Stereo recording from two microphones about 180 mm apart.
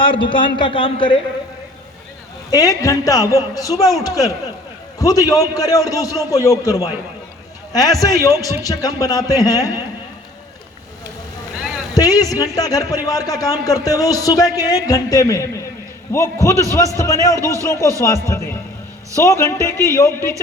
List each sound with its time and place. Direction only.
0.0 s speech: 30° left (ahead or behind)
2.5 s a man's voice: 20° left (ahead or behind)
4.9 s speech: 20° left (ahead or behind)
11.9 s a man's voice: 20° left (ahead or behind)